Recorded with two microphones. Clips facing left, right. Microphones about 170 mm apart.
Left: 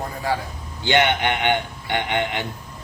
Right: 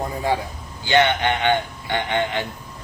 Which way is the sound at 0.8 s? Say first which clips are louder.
Right 1 dB; 15° left (ahead or behind).